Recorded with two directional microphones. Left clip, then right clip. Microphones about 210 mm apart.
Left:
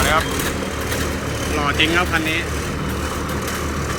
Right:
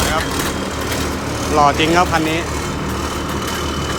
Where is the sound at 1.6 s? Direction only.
35° right (ahead or behind).